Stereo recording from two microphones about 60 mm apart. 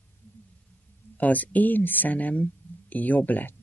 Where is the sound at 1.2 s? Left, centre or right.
Left.